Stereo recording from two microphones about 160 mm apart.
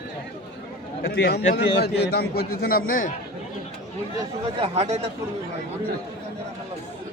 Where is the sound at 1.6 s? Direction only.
90° left; by 3.1 s 60° left (ahead or behind).